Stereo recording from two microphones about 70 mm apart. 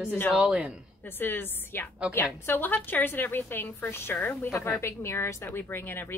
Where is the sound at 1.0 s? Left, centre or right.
Left.